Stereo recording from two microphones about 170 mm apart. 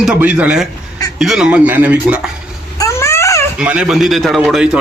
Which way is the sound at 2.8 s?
15° left (ahead or behind).